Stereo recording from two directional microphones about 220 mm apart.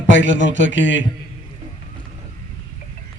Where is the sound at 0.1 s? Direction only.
55° left (ahead or behind).